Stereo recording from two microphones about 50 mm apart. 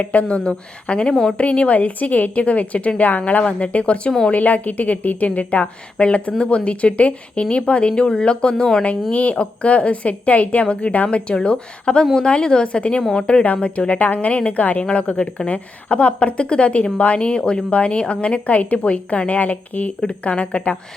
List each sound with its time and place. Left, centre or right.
0.0 s a woman's voice: left
1.1 s speech: centre
1.4 s a woman's voice: left
9.1 s a woman's voice: left
13.0 s a woman's voice: centre
13.2 s a woman's voice: left